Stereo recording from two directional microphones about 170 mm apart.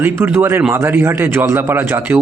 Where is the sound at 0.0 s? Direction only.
15° right (ahead or behind).